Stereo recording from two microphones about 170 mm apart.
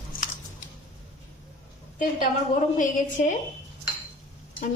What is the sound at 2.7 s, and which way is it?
Speech, 50° left (ahead or behind).